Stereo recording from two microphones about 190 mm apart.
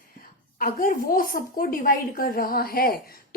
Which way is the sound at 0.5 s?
45° left (ahead or behind).